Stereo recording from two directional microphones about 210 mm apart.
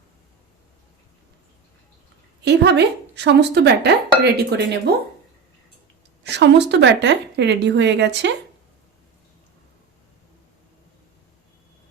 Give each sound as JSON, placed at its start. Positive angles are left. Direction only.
{"t": 2.4, "sound": "speech", "side_deg": -55}
{"t": 6.2, "sound": "a woman's voice", "side_deg": -55}